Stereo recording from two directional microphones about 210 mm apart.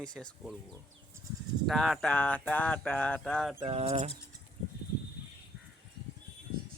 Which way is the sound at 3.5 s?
25° right (ahead or behind).